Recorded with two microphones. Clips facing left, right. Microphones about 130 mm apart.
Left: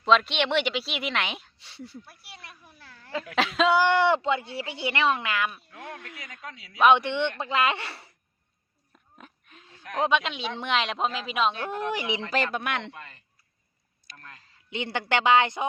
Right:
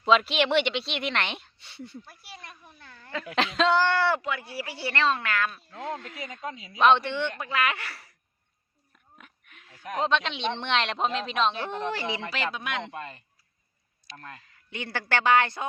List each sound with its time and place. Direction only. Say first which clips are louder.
0.0 s speech: even; 5° right (ahead or behind); by 5.5 s 15° left (ahead or behind)
5.8 s speech: right 7 dB; 15° right (ahead or behind)
6.7 s speech: left 1 dB; 10° left (ahead or behind); by 8.1 s 25° left (ahead or behind)
9.1 s a sound: left 4 dB; 30° left (ahead or behind)
10.0 s speech: left 1 dB; 10° left (ahead or behind)
12.3 s speech: left 4 dB; 45° left (ahead or behind)
12.5 s speech: left 3 dB; 60° left (ahead or behind)
12.9 s speech: right 6 dB; 20° right (ahead or behind)
14.4 s a woman's voice: left 6 dB; 25° left (ahead or behind)